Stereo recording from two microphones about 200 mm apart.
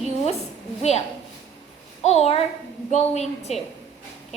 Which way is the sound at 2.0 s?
30° left (ahead or behind).